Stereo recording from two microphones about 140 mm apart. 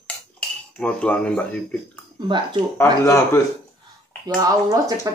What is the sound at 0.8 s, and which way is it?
Speech, 10° left (ahead or behind).